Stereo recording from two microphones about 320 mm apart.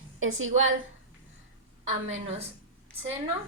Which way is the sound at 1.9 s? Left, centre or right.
Right.